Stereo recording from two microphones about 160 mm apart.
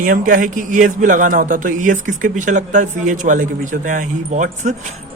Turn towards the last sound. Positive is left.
turn(degrees=-50)  # may be behind; listen again after turning